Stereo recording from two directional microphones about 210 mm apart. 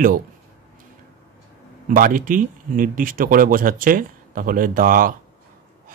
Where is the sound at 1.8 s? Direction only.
40° right (ahead or behind).